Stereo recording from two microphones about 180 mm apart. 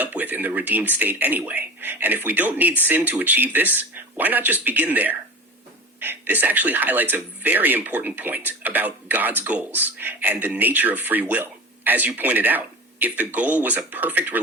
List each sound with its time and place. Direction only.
0.0 s speech: 10° right (ahead or behind)